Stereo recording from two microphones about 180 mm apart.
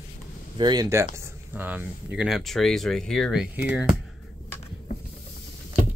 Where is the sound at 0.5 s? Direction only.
25° right (ahead or behind).